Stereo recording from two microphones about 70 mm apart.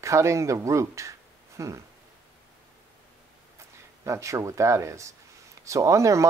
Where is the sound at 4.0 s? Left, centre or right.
Right.